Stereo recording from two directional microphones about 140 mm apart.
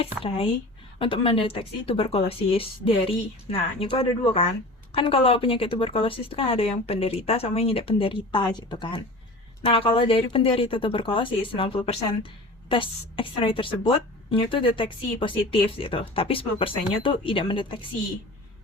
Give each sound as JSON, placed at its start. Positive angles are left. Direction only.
{"t": 0.0, "sound": "a woman's voice", "side_deg": 40}